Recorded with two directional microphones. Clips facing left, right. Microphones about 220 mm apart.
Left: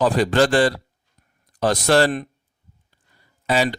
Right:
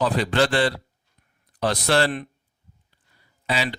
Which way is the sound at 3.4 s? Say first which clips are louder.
Left 6 dB; 45° left (ahead or behind).